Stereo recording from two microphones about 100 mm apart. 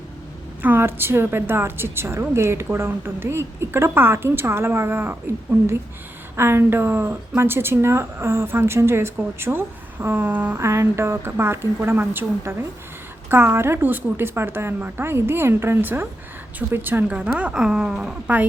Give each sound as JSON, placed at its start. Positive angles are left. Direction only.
{"t": 0.6, "sound": "a woman's voice", "side_deg": -20}
{"t": 6.3, "sound": "a woman's voice", "side_deg": -25}